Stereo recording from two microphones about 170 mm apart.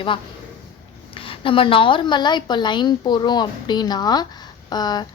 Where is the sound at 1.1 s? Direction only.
30° left (ahead or behind).